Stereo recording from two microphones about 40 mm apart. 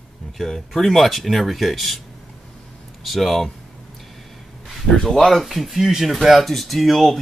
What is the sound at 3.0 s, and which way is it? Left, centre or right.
Speech, centre.